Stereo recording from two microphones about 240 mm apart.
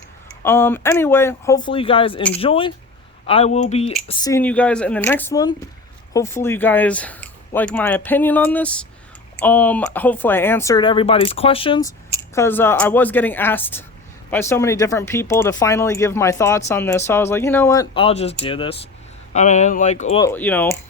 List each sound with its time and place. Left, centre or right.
0.4 s speech: centre; by 3.9 s left
4.1 s speech: centre
20.2 s speech: centre